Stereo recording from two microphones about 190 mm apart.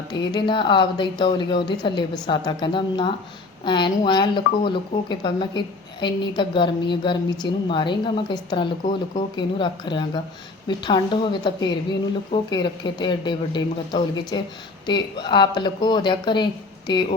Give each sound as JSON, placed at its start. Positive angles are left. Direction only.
{"t": 0.1, "sound": "speech", "side_deg": 25}